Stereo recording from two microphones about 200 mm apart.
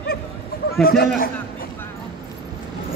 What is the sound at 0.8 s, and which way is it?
Speech, 50° left (ahead or behind).